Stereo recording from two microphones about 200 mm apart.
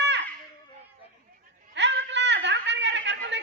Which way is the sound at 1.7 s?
65° right (ahead or behind).